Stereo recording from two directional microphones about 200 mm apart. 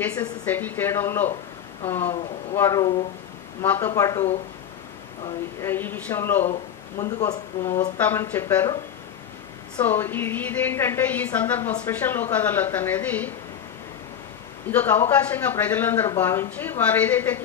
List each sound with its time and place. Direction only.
0.0 s a woman's voice: 10° left (ahead or behind)
5.6 s a woman's voice: 10° left (ahead or behind)
9.8 s a woman's voice: 10° left (ahead or behind)
14.7 s a woman's voice: 10° left (ahead or behind)